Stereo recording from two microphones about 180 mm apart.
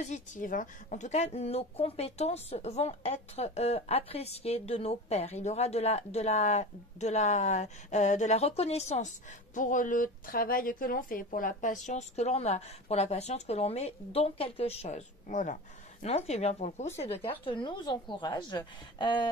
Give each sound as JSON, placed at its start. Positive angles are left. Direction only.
{"t": 0.0, "sound": "speech", "side_deg": 45}